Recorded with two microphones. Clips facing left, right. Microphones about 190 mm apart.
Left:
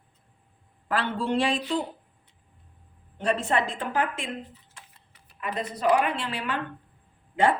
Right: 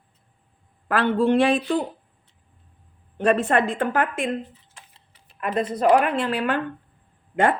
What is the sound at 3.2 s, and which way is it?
A woman's voice, 55° right (ahead or behind).